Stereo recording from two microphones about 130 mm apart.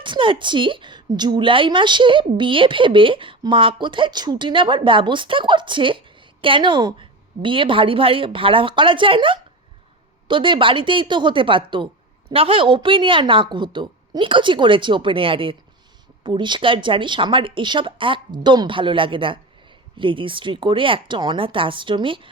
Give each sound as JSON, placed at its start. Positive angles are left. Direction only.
{"t": 0.0, "sound": "a woman's voice", "side_deg": -40}